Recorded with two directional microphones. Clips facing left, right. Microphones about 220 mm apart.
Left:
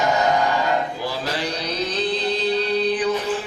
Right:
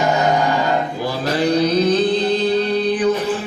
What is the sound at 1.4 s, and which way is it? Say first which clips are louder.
Music: right 11 dB; 50° right (ahead or behind).